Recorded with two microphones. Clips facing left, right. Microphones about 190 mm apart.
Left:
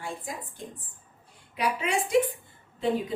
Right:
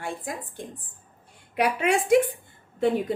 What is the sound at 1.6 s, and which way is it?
Speech, 60° right (ahead or behind).